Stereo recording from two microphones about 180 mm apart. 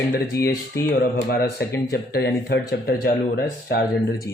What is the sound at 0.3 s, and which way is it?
Speech, 60° left (ahead or behind).